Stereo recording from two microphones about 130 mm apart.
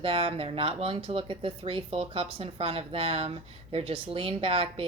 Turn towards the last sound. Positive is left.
turn(degrees=-45)  # may be behind; listen again after turning